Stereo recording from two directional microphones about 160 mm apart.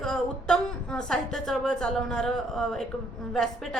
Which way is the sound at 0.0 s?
5° left (ahead or behind).